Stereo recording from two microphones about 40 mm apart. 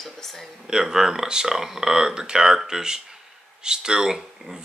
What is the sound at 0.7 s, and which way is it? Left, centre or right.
Speech, centre.